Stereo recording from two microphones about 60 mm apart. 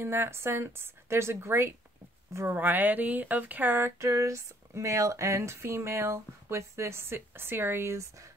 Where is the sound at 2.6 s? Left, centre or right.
Right.